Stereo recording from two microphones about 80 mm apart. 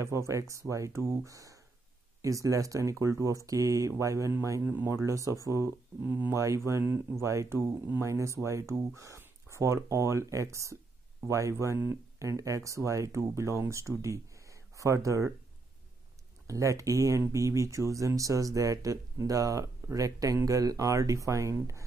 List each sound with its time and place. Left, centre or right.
0.0 s speech: right
6.3 s speech: right
16.4 s speech: right